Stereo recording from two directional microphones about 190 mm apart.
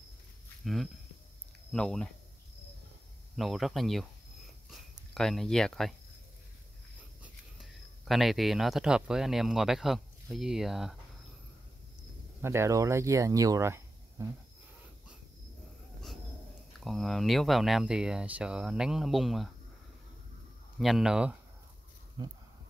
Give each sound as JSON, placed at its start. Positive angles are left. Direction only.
{"t": 0.6, "sound": "speech", "side_deg": 0}
{"t": 3.3, "sound": "speech", "side_deg": 0}
{"t": 7.5, "sound": "speech", "side_deg": 0}
{"t": 12.4, "sound": "speech", "side_deg": -15}
{"t": 16.8, "sound": "speech", "side_deg": 0}
{"t": 20.8, "sound": "speech", "side_deg": 0}